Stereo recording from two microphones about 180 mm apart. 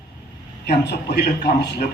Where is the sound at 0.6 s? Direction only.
65° left (ahead or behind).